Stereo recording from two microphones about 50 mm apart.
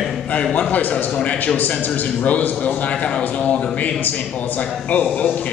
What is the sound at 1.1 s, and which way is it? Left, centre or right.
Speech, left.